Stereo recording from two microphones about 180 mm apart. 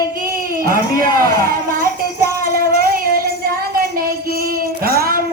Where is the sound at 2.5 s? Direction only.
55° right (ahead or behind).